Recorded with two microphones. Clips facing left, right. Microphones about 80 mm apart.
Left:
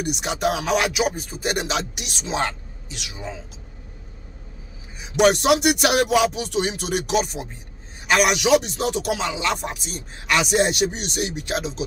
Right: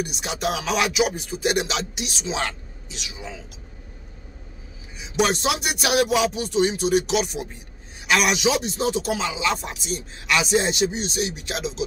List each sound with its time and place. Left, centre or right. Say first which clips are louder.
0.2 s speech: left 3 dB; left
5.2 s a man's voice: left 6 dB; left
8.4 s speech: left 4 dB; left